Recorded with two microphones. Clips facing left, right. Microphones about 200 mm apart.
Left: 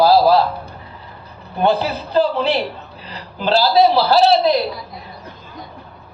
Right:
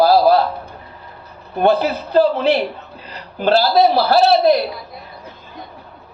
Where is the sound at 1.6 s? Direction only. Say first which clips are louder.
Right 2 dB; 50° right (ahead or behind).